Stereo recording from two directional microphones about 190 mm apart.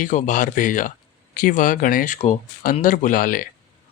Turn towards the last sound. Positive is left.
turn(degrees=45)  # may be behind; listen again after turning